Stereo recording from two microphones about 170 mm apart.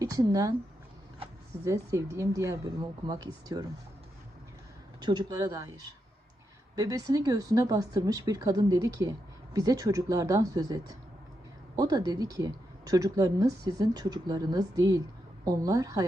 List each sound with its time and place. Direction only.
0.0 s speech: 20° right (ahead or behind)
1.6 s speech: 20° right (ahead or behind)
5.0 s speech: 25° right (ahead or behind)
6.7 s speech: 20° right (ahead or behind)